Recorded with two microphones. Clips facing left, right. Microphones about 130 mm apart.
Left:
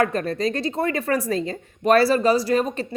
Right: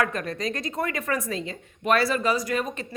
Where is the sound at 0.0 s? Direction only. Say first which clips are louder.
Left 5 dB; 35° left (ahead or behind).